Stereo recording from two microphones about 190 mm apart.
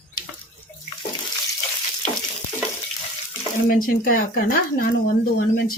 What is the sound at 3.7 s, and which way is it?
Speech, 50° left (ahead or behind).